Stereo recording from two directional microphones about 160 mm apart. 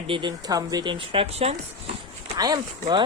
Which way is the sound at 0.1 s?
30° right (ahead or behind).